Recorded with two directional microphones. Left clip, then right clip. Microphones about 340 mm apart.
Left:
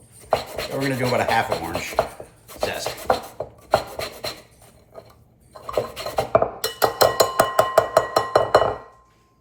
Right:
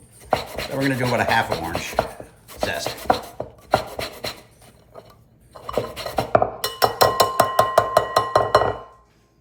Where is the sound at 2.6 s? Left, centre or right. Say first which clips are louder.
Right 1 dB; centre.